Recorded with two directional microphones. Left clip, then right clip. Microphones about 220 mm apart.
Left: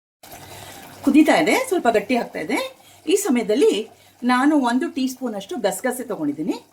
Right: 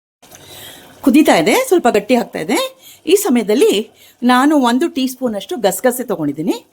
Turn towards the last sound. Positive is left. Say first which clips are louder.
# right 6 dB
turn(degrees=-45)  # may be behind; listen again after turning